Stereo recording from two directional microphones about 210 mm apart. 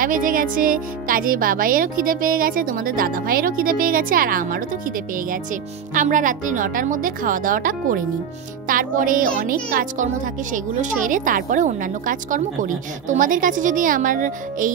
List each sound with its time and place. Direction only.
0.0 s speech: 40° right (ahead or behind)